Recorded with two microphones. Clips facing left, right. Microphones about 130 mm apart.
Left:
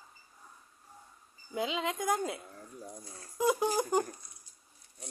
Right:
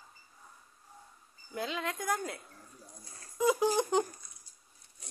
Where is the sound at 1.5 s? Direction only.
15° left (ahead or behind).